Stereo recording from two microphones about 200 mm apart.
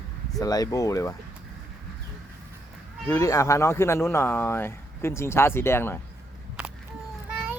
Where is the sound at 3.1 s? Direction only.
15° left (ahead or behind).